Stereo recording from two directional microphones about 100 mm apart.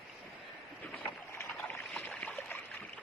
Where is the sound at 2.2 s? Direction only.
15° left (ahead or behind).